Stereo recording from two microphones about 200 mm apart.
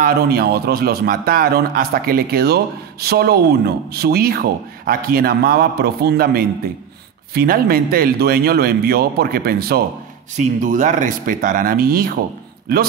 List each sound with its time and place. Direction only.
0.0 s a man's voice: 50° right (ahead or behind)
10.3 s a man's voice: 40° right (ahead or behind)